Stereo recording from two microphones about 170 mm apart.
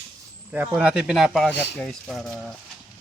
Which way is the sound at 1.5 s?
90° left.